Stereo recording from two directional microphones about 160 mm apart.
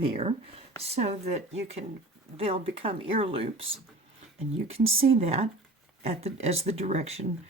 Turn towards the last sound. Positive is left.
turn(degrees=-40)  # may be behind; listen again after turning